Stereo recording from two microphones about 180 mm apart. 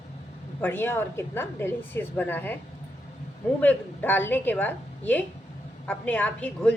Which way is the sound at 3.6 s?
10° left (ahead or behind).